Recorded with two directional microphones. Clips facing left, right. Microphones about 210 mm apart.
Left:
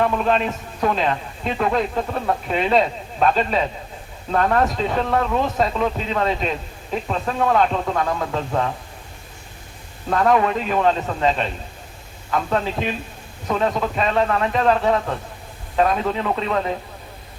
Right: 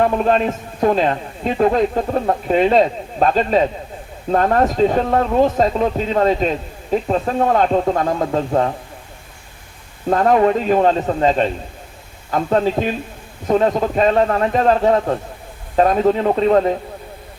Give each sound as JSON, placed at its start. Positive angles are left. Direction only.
{"t": 0.0, "sound": "a man's voice", "side_deg": -40}
{"t": 10.1, "sound": "a man's voice", "side_deg": -35}